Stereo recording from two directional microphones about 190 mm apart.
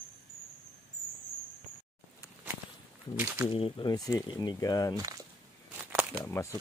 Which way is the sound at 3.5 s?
25° left (ahead or behind).